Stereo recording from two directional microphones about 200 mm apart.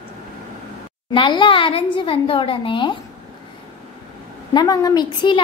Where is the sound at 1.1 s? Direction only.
25° left (ahead or behind).